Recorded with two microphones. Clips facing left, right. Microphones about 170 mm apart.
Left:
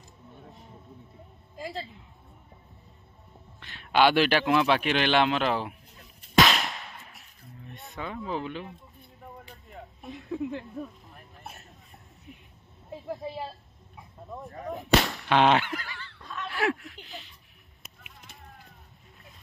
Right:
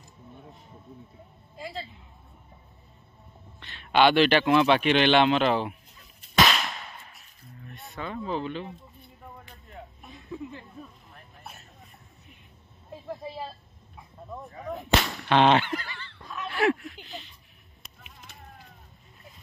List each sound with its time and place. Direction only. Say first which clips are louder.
3.5 s speech: right 1 dB; 5° left (ahead or behind)
6.6 s firecracker: even; centre (ahead or behind)
8.0 s speech: right 2 dB; 10° left (ahead or behind)
10.3 s speech: left 6 dB; 65° left (ahead or behind)
14.7 s a sound: left 2 dB; centre (ahead or behind)